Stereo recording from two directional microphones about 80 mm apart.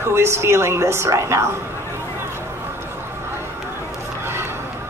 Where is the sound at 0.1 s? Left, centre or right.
Right.